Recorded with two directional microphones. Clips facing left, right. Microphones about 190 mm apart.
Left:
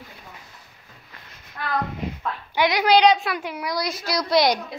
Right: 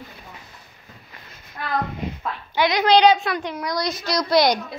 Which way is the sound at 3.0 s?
Centre (ahead or behind).